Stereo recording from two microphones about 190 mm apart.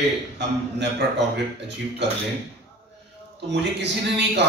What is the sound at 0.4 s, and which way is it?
A man's voice, 65° right (ahead or behind).